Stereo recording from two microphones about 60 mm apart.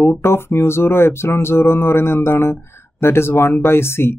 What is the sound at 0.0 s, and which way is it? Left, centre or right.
Mantra, left.